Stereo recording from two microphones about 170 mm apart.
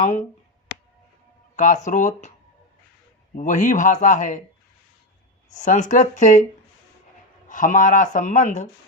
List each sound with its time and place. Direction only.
0.0 s speech: 45° left (ahead or behind)
1.5 s speech: 45° left (ahead or behind)
3.3 s speech: 50° left (ahead or behind)
5.6 s speech: 45° left (ahead or behind)
7.4 s speech: 50° left (ahead or behind)